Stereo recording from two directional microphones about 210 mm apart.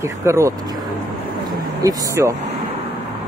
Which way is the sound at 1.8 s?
15° right (ahead or behind).